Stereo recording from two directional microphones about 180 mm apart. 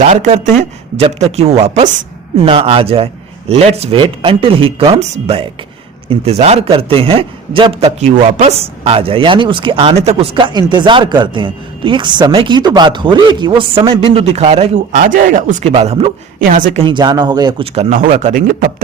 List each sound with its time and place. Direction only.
0.0 s a man's voice: 40° right (ahead or behind); by 17.7 s 25° right (ahead or behind)
17.7 s a man's voice: 40° right (ahead or behind)